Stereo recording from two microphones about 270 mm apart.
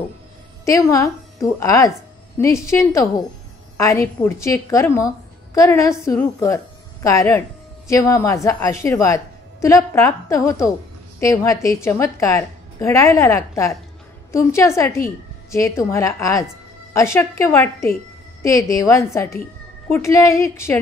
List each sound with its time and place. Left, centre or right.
0.7 s a woman's voice: centre